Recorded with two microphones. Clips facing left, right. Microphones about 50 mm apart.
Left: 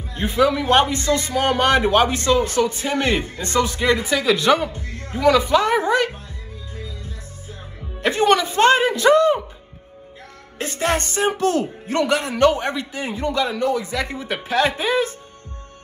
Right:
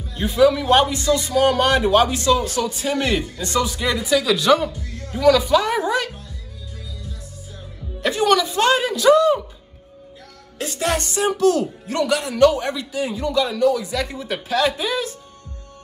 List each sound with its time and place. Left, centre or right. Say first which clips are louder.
0.1 s a man's voice: right 2 dB; left
8.0 s a man's voice: left 1 dB; left
10.6 s a man's voice: left 1 dB; left